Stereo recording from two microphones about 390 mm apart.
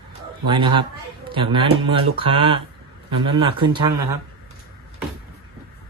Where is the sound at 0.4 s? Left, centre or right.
Centre.